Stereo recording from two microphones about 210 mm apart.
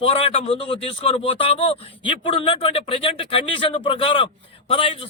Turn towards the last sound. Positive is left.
turn(degrees=25)  # may be behind; listen again after turning